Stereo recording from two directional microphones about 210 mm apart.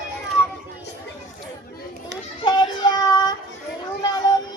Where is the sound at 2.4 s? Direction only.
20° left (ahead or behind).